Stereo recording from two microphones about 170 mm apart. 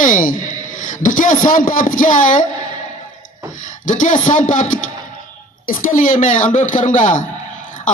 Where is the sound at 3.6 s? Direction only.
50° left (ahead or behind).